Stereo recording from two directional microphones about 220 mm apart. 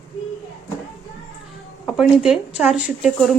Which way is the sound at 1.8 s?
Centre (ahead or behind).